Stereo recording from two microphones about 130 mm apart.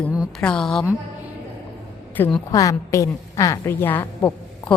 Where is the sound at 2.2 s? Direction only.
15° left (ahead or behind).